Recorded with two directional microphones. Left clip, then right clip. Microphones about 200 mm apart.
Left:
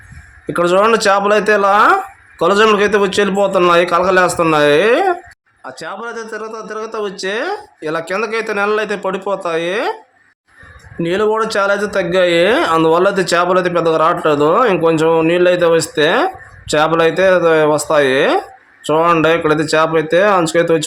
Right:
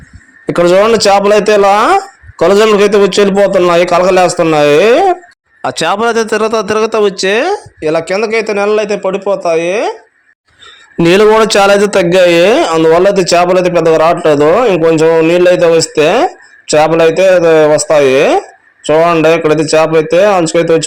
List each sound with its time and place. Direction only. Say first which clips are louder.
0.4 s a man's voice: right 5 dB; 25° right (ahead or behind)
5.6 s a man's voice: right 15 dB; 45° right (ahead or behind); by 9.9 s 15° right (ahead or behind)
11.0 s a man's voice: right 9 dB; 40° right (ahead or behind); by 20.8 s 15° right (ahead or behind)